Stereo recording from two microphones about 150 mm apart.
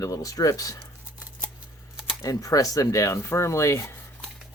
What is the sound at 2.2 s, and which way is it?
Speech, 20° left (ahead or behind).